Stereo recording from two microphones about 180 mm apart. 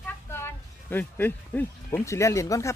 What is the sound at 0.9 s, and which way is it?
Speech, 10° left (ahead or behind).